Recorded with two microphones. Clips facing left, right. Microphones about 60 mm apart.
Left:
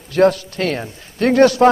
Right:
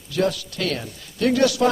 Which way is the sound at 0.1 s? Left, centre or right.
Left.